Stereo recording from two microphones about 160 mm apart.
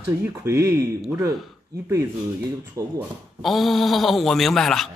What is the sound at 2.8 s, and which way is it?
Speech, 20° right (ahead or behind).